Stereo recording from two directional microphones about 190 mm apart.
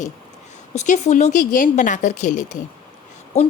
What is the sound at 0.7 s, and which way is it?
A woman's voice, 35° left (ahead or behind).